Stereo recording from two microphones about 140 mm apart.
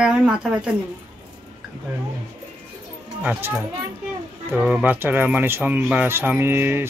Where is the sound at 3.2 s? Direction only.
10° right (ahead or behind).